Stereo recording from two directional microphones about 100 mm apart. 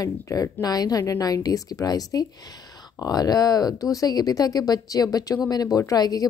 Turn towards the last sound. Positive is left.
turn(degrees=40)  # may be behind; listen again after turning